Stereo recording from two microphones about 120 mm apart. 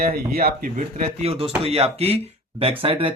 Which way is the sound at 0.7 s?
80° right.